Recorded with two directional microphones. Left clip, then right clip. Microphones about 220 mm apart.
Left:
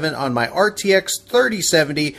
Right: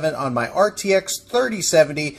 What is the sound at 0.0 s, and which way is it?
Speech, 25° left (ahead or behind).